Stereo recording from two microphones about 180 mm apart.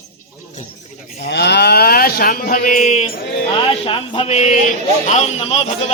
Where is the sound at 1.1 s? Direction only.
65° left (ahead or behind).